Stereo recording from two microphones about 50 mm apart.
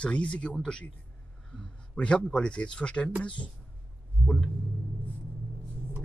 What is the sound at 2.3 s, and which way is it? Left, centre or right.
Speech, centre.